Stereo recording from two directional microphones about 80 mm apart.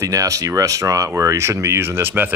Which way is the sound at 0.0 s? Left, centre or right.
Right.